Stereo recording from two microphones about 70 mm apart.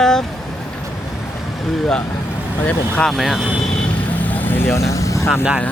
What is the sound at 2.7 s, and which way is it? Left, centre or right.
Speech, left.